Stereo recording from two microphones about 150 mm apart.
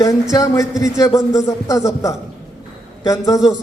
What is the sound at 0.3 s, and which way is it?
A man's voice, 20° left (ahead or behind).